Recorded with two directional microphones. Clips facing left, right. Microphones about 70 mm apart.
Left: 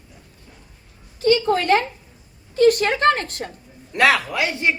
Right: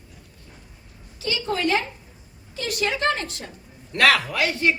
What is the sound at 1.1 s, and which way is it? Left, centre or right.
A woman's voice, left.